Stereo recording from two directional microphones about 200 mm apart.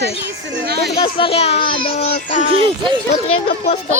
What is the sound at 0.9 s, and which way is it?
A woman's voice, 25° left (ahead or behind).